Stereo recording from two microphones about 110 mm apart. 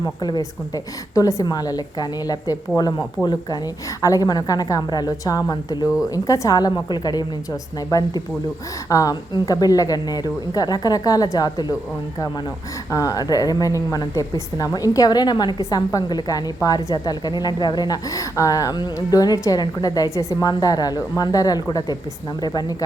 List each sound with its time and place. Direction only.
0.0 s a woman's voice: 40° left (ahead or behind)
1.1 s a woman's voice: 30° left (ahead or behind)
4.0 s a woman's voice: 30° left (ahead or behind)
12.9 s a woman's voice: 30° left (ahead or behind)